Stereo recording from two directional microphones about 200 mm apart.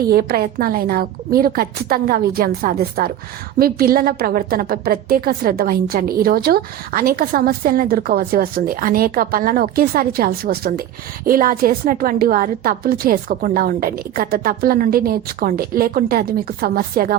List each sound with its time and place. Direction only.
0.1 s a woman's voice: 50° right (ahead or behind)